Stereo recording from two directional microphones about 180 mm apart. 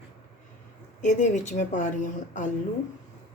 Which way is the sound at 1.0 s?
40° left (ahead or behind).